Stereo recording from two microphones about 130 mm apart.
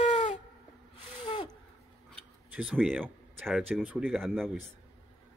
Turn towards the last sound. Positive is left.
turn(degrees=5)  # may be behind; listen again after turning